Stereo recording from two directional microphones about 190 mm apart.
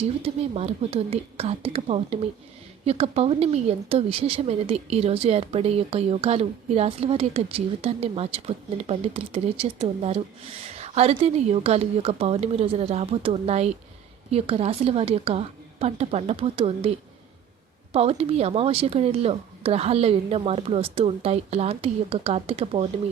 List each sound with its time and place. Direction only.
0.2 s a woman's voice: 30° right (ahead or behind)
17.9 s a woman's voice: 30° right (ahead or behind)